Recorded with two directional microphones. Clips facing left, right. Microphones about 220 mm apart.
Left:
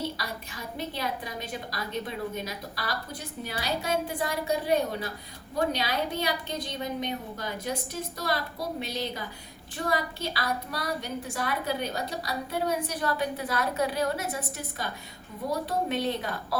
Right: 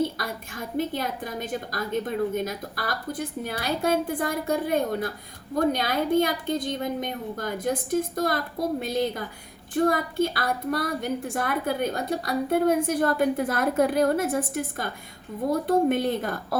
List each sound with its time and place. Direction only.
0.0 s a woman's voice: 50° right (ahead or behind)